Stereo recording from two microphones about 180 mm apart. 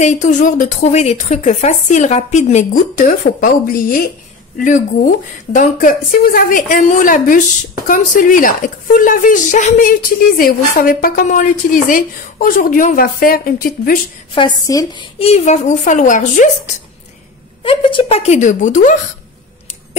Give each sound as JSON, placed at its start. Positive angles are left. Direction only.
{"t": 0.0, "sound": "a woman's voice", "side_deg": 40}
{"t": 14.7, "sound": "speech", "side_deg": 20}
{"t": 17.6, "sound": "speech", "side_deg": 30}